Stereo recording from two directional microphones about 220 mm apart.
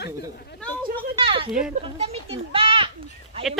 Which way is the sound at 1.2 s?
25° right (ahead or behind).